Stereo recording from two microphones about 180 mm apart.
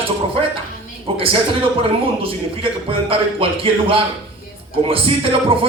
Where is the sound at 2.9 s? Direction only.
30° right (ahead or behind).